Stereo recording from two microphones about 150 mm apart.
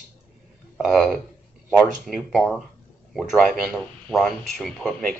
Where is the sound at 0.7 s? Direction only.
Centre (ahead or behind).